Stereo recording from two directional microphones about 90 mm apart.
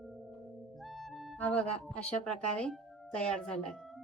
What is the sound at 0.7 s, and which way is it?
Music, centre (ahead or behind).